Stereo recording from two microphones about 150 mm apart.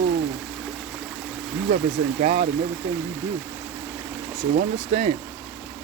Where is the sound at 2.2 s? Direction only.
50° right (ahead or behind).